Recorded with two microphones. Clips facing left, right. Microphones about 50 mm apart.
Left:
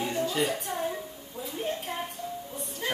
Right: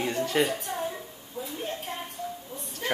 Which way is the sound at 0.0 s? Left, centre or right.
Right.